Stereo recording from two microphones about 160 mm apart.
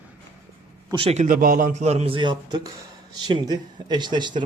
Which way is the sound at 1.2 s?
60° right (ahead or behind).